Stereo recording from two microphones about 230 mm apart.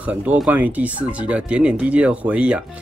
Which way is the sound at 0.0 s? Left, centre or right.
Centre.